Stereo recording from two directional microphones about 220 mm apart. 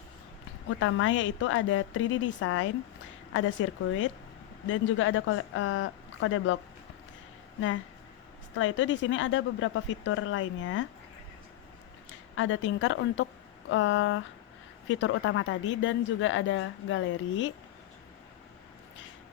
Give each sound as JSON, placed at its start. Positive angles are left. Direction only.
{"t": 0.7, "sound": "speech", "side_deg": 65}
{"t": 8.5, "sound": "speech", "side_deg": 65}
{"t": 12.4, "sound": "speech", "side_deg": 60}